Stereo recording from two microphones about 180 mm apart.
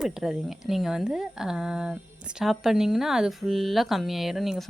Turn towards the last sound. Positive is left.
turn(degrees=0)  # may be behind; listen again after turning